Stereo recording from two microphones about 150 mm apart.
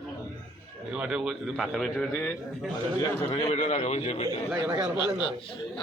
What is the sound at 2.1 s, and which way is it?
Speech, 15° left (ahead or behind).